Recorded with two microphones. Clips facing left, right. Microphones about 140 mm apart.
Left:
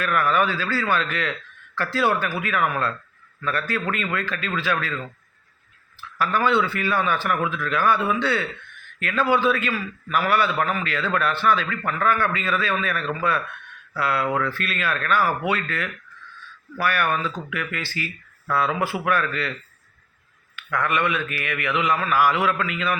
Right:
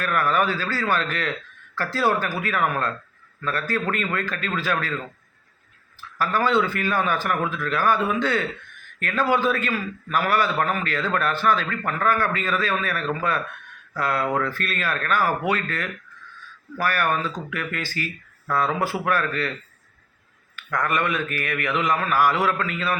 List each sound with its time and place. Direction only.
0.0 s a man's voice: 40° right (ahead or behind)
6.0 s a man's voice: 40° right (ahead or behind)
20.6 s a man's voice: 40° right (ahead or behind)